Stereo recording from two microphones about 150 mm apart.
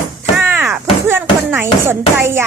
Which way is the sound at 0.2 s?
15° right (ahead or behind).